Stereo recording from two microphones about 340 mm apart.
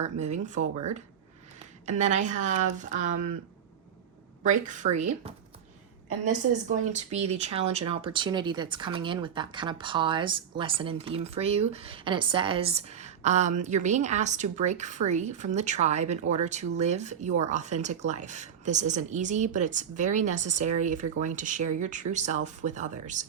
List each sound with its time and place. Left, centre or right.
0.0 s speech: centre
1.9 s speech: right
4.4 s speech: right